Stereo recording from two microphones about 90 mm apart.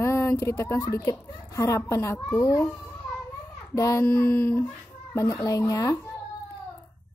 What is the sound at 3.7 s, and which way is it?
Speech, 35° left (ahead or behind).